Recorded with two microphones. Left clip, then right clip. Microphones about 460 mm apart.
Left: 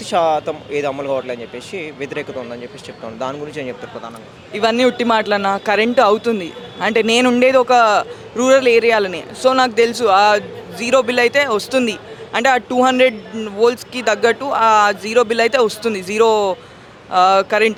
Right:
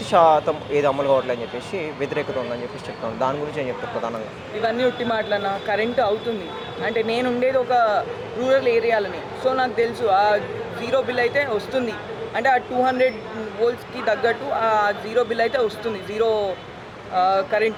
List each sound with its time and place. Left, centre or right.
0.1 s speech: centre
4.6 s a man's voice: left